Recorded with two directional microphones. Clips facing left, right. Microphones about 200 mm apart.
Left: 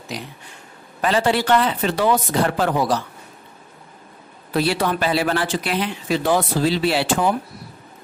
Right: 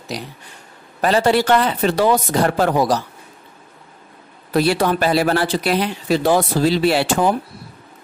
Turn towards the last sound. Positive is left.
turn(degrees=-45)  # may be behind; listen again after turning